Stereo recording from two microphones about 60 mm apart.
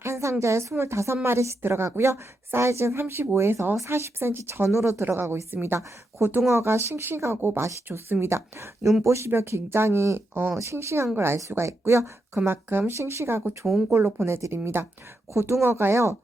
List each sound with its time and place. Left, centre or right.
0.0 s a woman's voice: right
5.5 s speech: right